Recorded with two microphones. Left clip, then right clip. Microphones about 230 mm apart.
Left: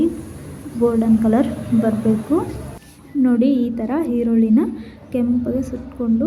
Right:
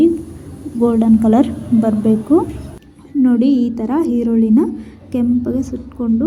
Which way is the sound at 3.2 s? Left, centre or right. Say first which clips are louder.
Right 3 dB; centre.